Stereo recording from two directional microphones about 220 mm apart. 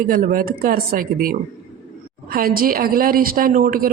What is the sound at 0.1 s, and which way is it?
A woman's voice, 40° right (ahead or behind).